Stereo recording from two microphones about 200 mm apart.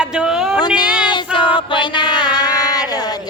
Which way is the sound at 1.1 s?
25° left (ahead or behind).